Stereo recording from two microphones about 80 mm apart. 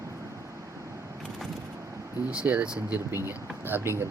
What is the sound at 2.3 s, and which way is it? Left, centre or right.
Speech, centre.